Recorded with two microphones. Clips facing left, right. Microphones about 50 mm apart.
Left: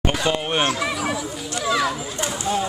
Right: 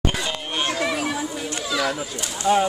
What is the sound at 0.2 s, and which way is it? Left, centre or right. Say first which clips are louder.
Chatter: left 5 dB; left.